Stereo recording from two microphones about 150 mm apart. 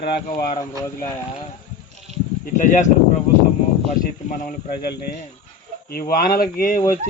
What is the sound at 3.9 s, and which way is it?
Speech, 65° left (ahead or behind).